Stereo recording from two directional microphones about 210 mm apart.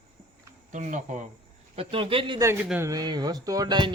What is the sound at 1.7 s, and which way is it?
Speech, 25° right (ahead or behind).